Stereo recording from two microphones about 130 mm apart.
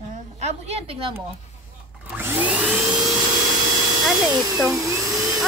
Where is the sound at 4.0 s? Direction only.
5° right (ahead or behind).